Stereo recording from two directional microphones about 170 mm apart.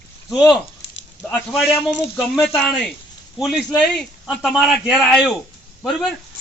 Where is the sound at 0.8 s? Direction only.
90° left.